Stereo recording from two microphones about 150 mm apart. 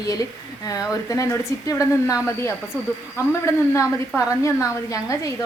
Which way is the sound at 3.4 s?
20° left (ahead or behind).